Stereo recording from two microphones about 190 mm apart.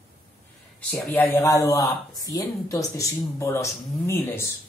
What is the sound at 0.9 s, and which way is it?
Speech, centre (ahead or behind).